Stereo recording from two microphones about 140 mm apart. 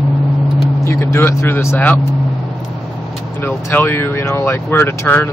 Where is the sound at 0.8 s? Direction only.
20° left (ahead or behind).